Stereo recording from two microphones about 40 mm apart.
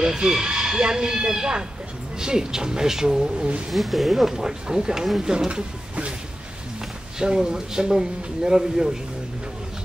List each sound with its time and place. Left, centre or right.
0.0 s speech: centre
3.7 s speech: centre
7.2 s speech: centre